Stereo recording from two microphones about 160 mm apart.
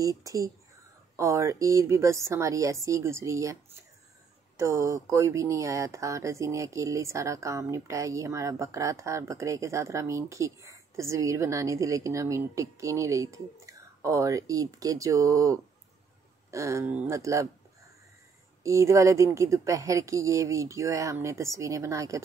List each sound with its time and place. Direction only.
0.0 s speech: 20° right (ahead or behind)
4.6 s speech: 20° right (ahead or behind)
18.6 s speech: 20° right (ahead or behind)